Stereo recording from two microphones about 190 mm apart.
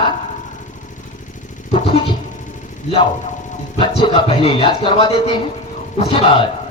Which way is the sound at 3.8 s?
30° left (ahead or behind).